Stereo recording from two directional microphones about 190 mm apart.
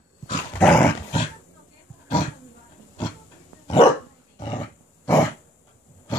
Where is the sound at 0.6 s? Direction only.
5° left (ahead or behind).